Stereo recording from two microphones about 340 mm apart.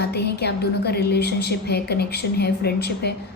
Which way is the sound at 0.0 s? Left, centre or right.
Left.